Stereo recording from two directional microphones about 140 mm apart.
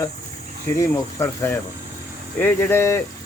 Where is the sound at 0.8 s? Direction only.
20° left (ahead or behind).